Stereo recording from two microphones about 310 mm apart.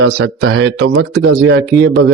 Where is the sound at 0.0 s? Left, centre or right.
Right.